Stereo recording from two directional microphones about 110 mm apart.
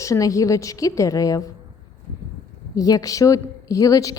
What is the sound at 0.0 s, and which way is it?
A woman's voice, 30° left (ahead or behind).